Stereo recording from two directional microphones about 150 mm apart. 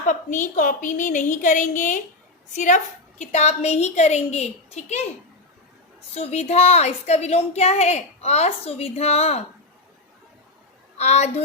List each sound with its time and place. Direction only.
0.1 s a woman's voice: 60° left (ahead or behind)
6.1 s a woman's voice: 45° left (ahead or behind)
10.9 s a woman's voice: 45° left (ahead or behind)